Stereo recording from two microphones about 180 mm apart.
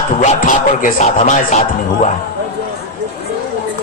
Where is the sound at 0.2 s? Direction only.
45° left (ahead or behind).